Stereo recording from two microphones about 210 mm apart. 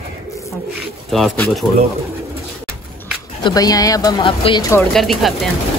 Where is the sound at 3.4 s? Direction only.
15° left (ahead or behind).